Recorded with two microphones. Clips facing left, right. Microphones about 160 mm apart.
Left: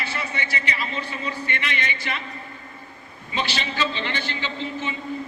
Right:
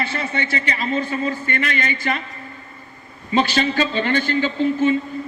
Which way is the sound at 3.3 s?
45° right (ahead or behind).